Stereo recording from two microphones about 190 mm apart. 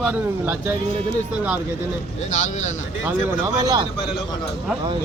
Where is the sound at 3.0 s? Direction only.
15° right (ahead or behind).